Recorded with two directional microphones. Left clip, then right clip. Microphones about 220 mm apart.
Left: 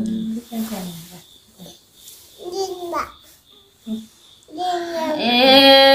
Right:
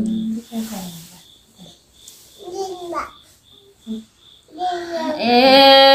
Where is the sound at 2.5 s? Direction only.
55° left (ahead or behind).